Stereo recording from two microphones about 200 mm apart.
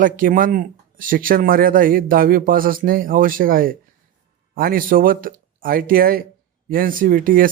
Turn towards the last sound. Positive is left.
turn(degrees=-45)  # may be behind; listen again after turning